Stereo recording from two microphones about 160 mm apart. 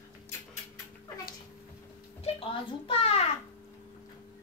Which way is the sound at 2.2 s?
35° left (ahead or behind).